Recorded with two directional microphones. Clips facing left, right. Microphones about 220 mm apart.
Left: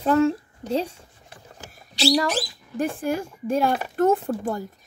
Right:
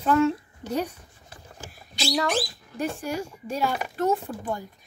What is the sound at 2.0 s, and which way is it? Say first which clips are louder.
Speech: left 4 dB; 35° left (ahead or behind).